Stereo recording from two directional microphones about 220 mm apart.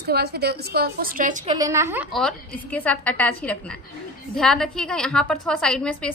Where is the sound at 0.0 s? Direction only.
45° right (ahead or behind).